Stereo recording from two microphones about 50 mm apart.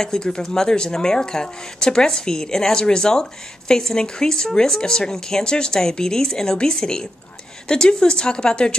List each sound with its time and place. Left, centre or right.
0.0 s speech: centre